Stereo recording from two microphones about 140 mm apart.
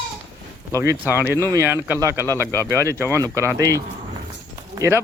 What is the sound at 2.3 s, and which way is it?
Speech, 15° left (ahead or behind).